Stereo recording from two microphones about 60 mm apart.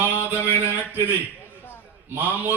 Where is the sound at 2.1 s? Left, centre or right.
Right.